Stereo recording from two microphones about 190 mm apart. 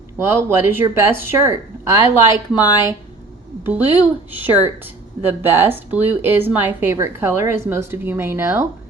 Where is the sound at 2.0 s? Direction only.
25° left (ahead or behind).